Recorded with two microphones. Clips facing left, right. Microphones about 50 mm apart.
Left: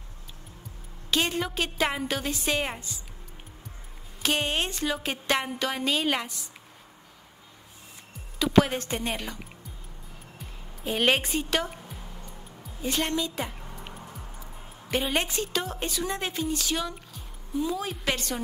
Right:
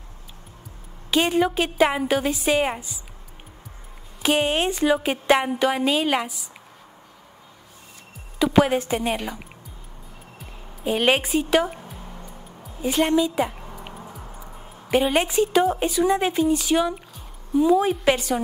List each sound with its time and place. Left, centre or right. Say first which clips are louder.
1.1 s a woman's voice: right 7 dB; centre
4.2 s a woman's voice: right 6 dB; centre
8.4 s a woman's voice: right 4 dB; centre
10.4 s music: right 7 dB; centre
14.9 s a woman's voice: right 7 dB; centre